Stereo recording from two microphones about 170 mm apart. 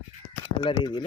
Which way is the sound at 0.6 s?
25° left (ahead or behind).